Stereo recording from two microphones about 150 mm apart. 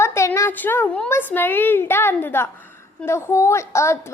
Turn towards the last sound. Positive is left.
turn(degrees=20)  # may be behind; listen again after turning